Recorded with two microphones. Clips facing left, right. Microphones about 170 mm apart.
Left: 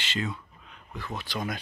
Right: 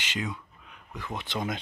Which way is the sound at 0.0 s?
15° right (ahead or behind).